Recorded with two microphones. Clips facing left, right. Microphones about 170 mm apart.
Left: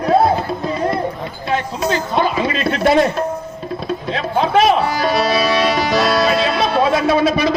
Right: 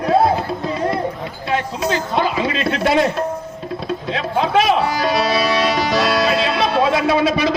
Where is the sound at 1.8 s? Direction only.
50° left (ahead or behind).